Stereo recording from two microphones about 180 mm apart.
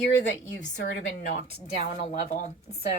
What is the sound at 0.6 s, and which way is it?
Speech, 45° left (ahead or behind).